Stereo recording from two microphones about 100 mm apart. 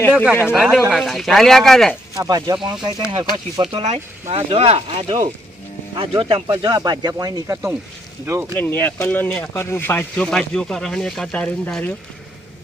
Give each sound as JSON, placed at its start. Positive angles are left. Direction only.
{"t": 0.1, "sound": "speech", "side_deg": -10}
{"t": 2.1, "sound": "speech", "side_deg": -40}
{"t": 3.7, "sound": "speech", "side_deg": -90}
{"t": 6.6, "sound": "speech", "side_deg": -45}
{"t": 8.5, "sound": "speech", "side_deg": 20}